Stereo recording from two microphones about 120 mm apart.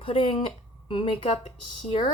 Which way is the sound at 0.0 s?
45° left (ahead or behind).